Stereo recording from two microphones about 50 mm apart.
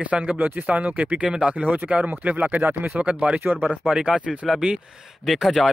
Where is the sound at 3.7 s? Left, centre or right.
Centre.